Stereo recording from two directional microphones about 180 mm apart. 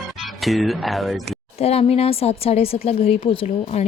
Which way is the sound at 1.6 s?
35° left (ahead or behind).